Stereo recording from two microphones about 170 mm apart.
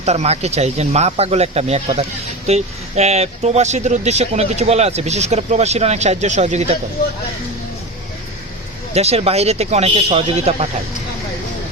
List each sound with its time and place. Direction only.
0.0 s speech: 40° right (ahead or behind)
8.9 s speech: 40° right (ahead or behind)